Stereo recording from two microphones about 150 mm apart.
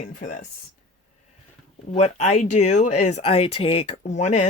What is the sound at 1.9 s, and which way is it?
Speech, 50° left (ahead or behind).